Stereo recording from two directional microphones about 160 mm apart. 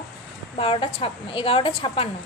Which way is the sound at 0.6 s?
35° left (ahead or behind).